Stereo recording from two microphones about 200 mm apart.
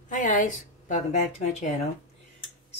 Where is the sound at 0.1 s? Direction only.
40° left (ahead or behind).